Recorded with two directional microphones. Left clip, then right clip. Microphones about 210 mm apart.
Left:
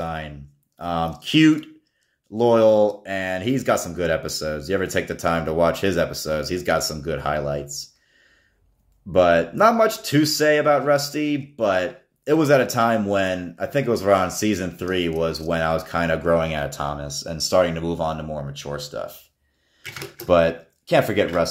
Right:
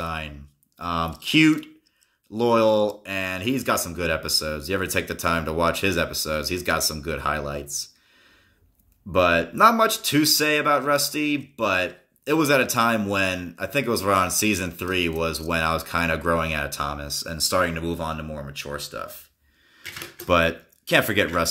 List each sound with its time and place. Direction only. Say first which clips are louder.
0.0 s a sound: left 1 dB; 10° right (ahead or behind)
0.7 s speech: left 2 dB; 10° right (ahead or behind)
9.1 s speech: left 3 dB; 10° right (ahead or behind)
20.2 s speech: left 3 dB; 15° right (ahead or behind)